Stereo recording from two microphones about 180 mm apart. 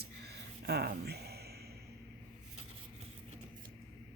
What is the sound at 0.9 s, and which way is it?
Music, 60° right (ahead or behind).